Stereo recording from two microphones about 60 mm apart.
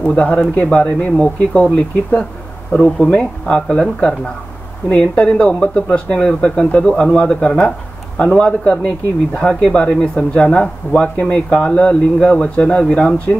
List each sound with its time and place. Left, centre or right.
0.0 s speech: left